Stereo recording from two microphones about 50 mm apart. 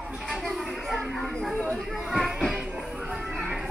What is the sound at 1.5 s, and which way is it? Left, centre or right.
Chatter, centre.